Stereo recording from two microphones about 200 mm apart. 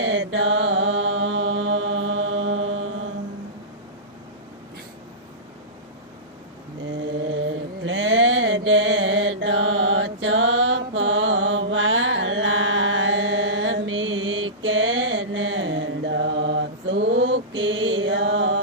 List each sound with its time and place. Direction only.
0.0 s mantra: 70° right (ahead or behind); by 2.8 s 90° right
7.9 s mantra: 65° right (ahead or behind)